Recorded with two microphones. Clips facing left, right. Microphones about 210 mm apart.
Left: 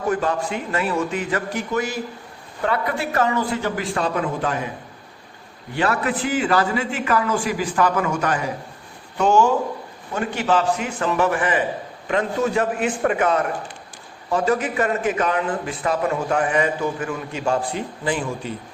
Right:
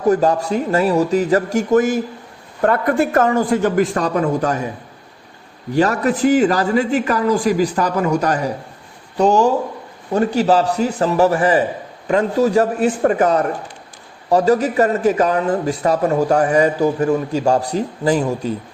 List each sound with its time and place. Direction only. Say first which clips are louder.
0.1 s a man's voice: right 8 dB; 40° right (ahead or behind)
5.7 s a man's voice: right 6 dB; 40° right (ahead or behind)